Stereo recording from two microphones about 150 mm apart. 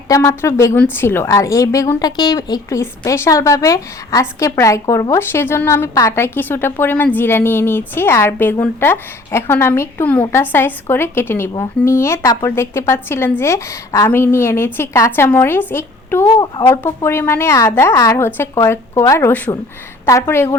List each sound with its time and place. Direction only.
0.1 s a woman's voice: 20° left (ahead or behind)